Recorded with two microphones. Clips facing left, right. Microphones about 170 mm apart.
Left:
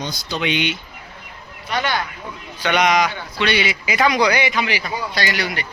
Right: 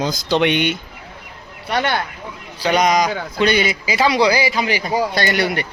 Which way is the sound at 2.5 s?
35° right (ahead or behind).